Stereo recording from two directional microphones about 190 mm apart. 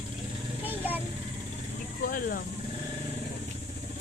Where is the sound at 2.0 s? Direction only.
45° left (ahead or behind).